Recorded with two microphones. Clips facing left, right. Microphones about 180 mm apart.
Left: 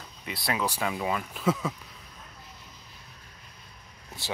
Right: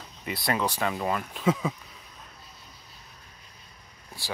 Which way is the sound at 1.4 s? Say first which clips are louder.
Right 2 dB; 10° right (ahead or behind).